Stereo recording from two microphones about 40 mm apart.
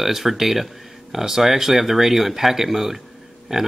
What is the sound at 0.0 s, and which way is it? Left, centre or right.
Speech, centre.